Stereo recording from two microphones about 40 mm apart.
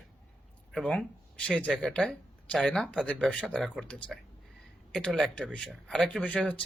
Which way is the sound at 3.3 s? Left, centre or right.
Left.